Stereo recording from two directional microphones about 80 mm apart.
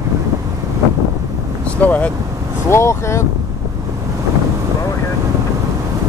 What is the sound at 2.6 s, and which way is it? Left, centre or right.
Speech, left.